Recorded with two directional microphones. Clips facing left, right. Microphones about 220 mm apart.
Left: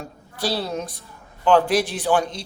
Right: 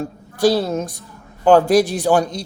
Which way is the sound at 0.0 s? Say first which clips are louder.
Right 11 dB; 45° right (ahead or behind).